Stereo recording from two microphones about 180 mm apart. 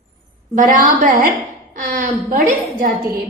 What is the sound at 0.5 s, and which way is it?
A woman's voice, 45° right (ahead or behind).